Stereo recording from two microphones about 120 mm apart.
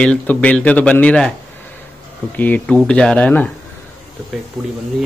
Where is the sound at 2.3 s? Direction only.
15° left (ahead or behind).